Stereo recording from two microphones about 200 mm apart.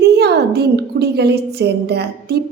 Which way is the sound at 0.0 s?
55° right (ahead or behind).